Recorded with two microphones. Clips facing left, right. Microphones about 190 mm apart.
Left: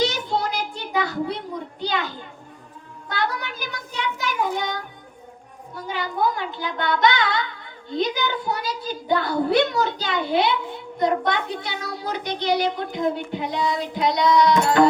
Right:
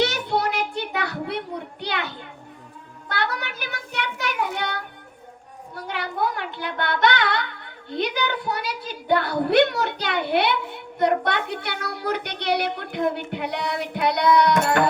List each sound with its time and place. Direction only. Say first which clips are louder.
0.0 s child singing: right 1 dB; 65° right (ahead or behind)
3.1 s speech: left 1 dB; 65° right (ahead or behind)